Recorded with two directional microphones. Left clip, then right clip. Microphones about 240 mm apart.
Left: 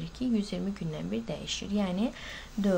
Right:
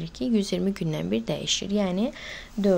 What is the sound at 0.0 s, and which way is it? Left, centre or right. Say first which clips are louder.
Speech: right 6 dB; right.